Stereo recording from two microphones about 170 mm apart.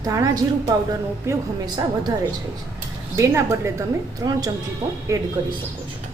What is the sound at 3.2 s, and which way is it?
Speech, 15° right (ahead or behind).